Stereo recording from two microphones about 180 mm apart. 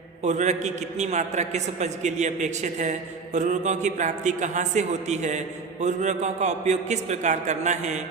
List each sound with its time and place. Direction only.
0.2 s a man's voice: 40° right (ahead or behind)